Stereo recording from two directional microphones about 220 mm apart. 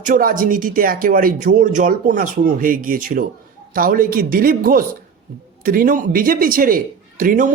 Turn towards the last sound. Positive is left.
turn(degrees=-40)  # may be behind; listen again after turning